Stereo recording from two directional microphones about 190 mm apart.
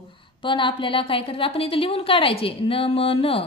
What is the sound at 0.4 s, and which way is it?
A woman's voice, 25° left (ahead or behind).